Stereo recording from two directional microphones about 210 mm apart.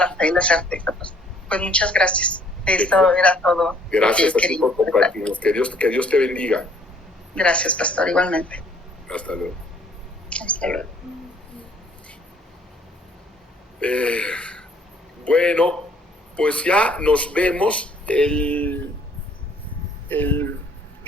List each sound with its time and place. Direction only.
0.0 s a woman's voice: 5° left (ahead or behind)
13.7 s a woman's voice: 5° left (ahead or behind)
20.1 s speech: 10° left (ahead or behind)